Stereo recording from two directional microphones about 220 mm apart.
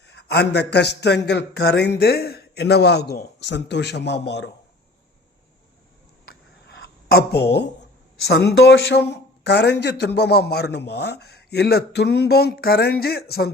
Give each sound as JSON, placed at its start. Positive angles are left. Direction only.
{"t": 0.0, "sound": "speech", "side_deg": 50}
{"t": 6.7, "sound": "a sound", "side_deg": 45}
{"t": 8.3, "sound": "speech", "side_deg": 45}